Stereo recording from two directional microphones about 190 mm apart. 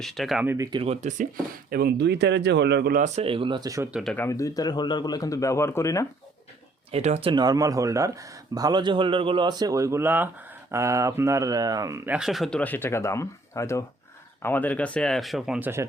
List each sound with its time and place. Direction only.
0.0 s speech: centre (ahead or behind)
0.4 s speech: 15° right (ahead or behind)
0.8 s speech: 35° right (ahead or behind)
1.7 s speech: 55° right (ahead or behind)
3.0 s speech: 30° right (ahead or behind)
3.9 s speech: 5° left (ahead or behind)
6.9 s speech: 35° right (ahead or behind); by 15.9 s 10° right (ahead or behind)